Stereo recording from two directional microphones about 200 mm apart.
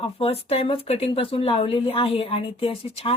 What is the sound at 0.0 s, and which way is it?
Speech, 30° left (ahead or behind).